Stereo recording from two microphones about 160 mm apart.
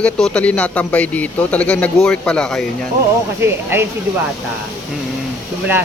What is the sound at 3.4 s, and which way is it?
Speech, 15° right (ahead or behind).